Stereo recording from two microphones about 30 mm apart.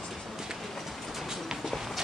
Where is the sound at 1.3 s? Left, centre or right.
Centre.